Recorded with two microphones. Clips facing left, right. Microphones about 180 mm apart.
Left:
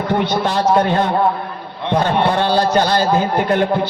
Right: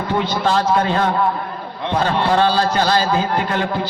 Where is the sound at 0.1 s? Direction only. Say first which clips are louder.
Even; 60° left (ahead or behind).